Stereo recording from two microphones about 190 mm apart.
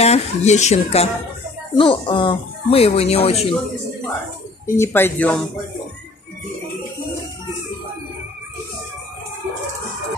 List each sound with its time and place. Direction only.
0.0 s speech: 35° left (ahead or behind)
4.6 s speech: 15° left (ahead or behind)